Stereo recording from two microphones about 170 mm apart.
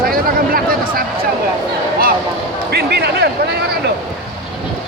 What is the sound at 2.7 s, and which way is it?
Speech, 70° right (ahead or behind).